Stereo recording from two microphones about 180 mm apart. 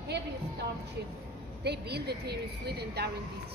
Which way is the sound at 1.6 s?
65° right (ahead or behind).